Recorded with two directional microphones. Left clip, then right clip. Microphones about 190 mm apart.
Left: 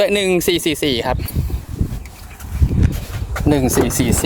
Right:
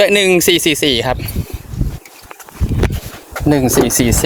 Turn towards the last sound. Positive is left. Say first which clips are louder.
# right 4 dB
turn(degrees=-15)  # may be behind; listen again after turning